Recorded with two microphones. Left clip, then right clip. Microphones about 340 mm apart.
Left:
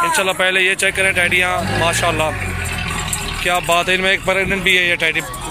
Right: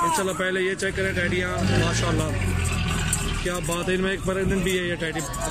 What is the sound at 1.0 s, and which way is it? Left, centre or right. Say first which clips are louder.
Speech: left 11 dB; left.